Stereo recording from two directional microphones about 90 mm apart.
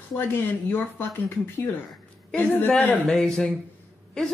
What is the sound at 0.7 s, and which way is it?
Speech, 25° left (ahead or behind).